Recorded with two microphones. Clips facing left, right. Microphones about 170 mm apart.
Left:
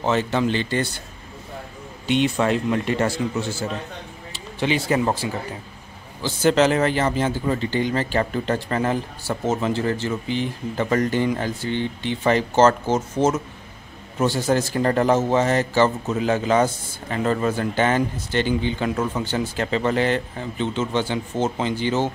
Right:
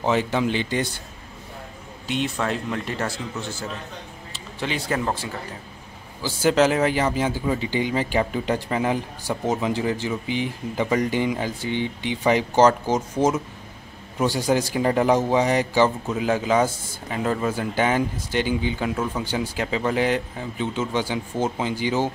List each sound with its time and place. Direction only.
0.0 s speech: 10° right (ahead or behind)
2.0 s a man's voice: centre (ahead or behind)
4.3 s a sound: centre (ahead or behind)
6.2 s speech: 10° right (ahead or behind)